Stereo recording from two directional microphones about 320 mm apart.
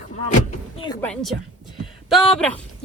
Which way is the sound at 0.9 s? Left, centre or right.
Centre.